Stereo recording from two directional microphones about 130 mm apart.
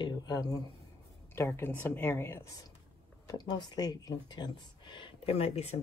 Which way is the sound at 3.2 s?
35° left (ahead or behind).